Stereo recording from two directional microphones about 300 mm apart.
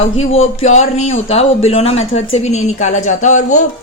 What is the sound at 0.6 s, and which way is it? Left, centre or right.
A woman's voice, left.